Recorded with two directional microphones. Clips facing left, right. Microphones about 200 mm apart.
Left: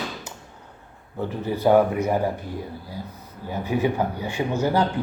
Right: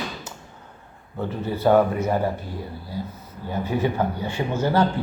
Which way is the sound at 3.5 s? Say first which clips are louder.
Left 1 dB; 10° left (ahead or behind).